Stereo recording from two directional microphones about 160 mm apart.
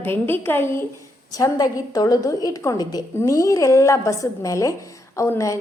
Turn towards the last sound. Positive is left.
turn(degrees=20)  # may be behind; listen again after turning